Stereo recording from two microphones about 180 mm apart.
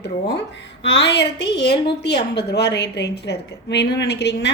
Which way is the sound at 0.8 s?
75° left (ahead or behind).